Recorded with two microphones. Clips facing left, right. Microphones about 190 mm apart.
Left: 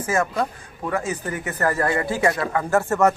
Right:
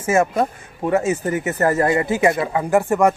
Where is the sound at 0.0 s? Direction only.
25° right (ahead or behind).